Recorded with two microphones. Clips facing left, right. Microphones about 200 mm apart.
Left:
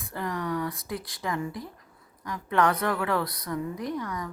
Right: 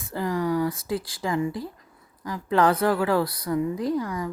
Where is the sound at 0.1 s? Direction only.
30° right (ahead or behind).